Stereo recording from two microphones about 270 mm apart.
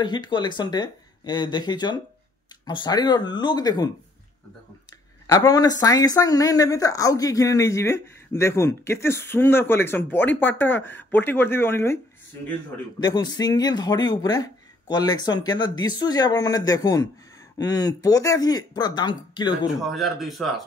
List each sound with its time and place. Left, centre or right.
0.0 s speech: centre
5.2 s speech: centre
13.0 s speech: centre
19.9 s speech: centre